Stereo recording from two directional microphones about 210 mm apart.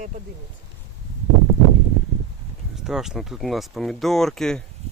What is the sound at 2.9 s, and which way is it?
Speech, centre (ahead or behind).